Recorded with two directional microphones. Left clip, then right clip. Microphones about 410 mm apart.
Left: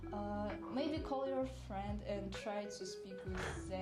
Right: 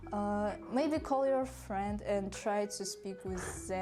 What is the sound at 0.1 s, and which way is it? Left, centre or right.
Speech, right.